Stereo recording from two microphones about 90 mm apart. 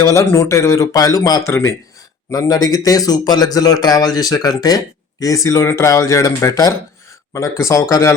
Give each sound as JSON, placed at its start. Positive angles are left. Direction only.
{"t": 0.0, "sound": "speech", "side_deg": 35}
{"t": 1.5, "sound": "speech", "side_deg": 30}
{"t": 2.3, "sound": "speech", "side_deg": 45}